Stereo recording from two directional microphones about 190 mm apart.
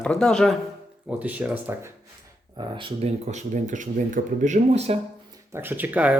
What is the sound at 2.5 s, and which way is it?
Speech, 25° right (ahead or behind).